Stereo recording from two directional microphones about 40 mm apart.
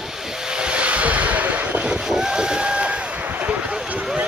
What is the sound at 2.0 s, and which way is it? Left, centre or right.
Vehicle, centre.